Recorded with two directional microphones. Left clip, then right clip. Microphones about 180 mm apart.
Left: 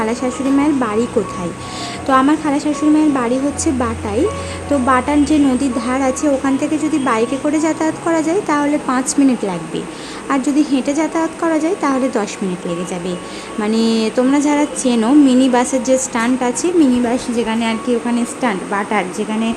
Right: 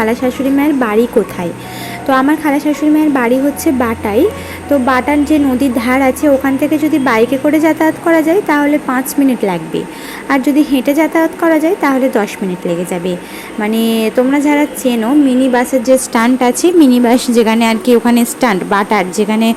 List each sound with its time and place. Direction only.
0.0 s a woman's voice: 10° right (ahead or behind)
2.0 s a woman's voice: 5° right (ahead or behind)
13.6 s a woman's voice: 5° right (ahead or behind)
16.1 s a woman's voice: 25° right (ahead or behind)